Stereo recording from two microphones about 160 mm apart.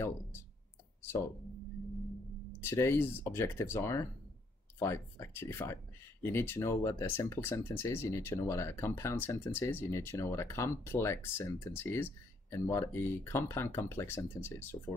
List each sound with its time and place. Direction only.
2.6 s speech: 15° left (ahead or behind)